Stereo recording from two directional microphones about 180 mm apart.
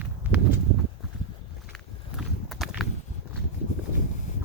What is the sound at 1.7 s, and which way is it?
Walk, centre (ahead or behind).